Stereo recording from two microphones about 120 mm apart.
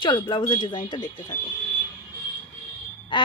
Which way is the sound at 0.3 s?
40° left (ahead or behind).